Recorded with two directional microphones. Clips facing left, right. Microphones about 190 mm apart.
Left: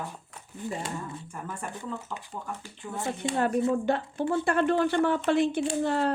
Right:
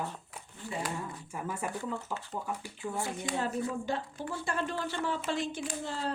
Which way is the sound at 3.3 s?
60° left (ahead or behind).